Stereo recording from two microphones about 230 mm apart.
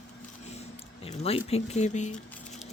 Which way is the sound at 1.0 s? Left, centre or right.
Left.